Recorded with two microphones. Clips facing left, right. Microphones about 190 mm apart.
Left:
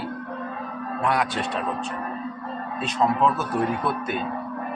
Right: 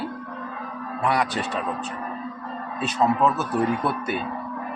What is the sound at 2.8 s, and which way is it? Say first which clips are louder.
Speech: right 1 dB; 10° right (ahead or behind).